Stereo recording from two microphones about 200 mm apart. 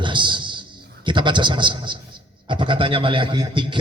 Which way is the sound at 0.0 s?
25° right (ahead or behind).